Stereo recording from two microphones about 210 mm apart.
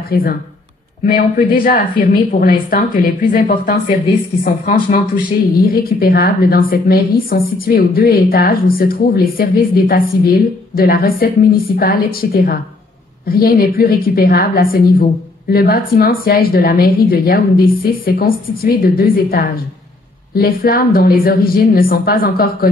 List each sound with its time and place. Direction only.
0.1 s a woman's voice: 45° left (ahead or behind)